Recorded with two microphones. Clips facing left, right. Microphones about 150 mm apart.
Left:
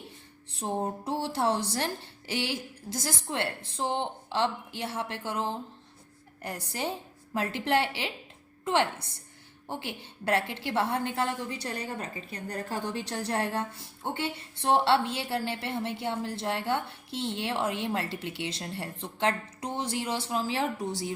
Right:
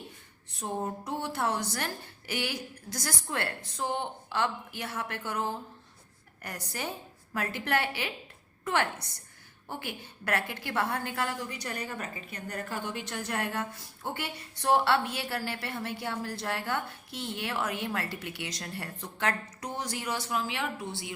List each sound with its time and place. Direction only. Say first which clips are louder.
0.5 s a woman's voice: left 2 dB; 30° left (ahead or behind)